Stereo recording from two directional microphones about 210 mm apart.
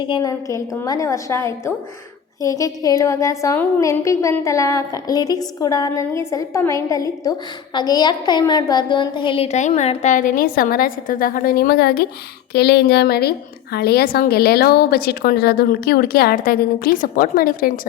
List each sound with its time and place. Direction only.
0.0 s a woman's voice: 20° left (ahead or behind); by 17.7 s 45° left (ahead or behind)